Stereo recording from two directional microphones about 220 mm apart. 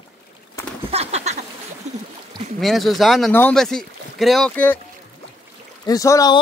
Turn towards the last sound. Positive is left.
turn(degrees=15)  # may be behind; listen again after turning